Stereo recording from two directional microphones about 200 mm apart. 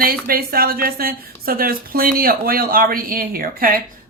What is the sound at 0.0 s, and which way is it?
A woman's voice, 45° right (ahead or behind).